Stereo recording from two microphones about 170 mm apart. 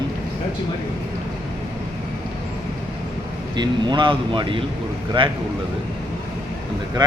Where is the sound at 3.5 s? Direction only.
25° right (ahead or behind).